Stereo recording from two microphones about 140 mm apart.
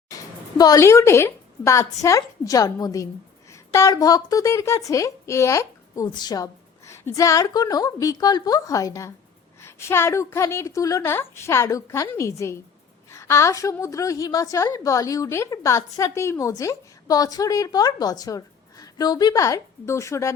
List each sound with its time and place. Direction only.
0.1 s a woman's voice: 25° left (ahead or behind)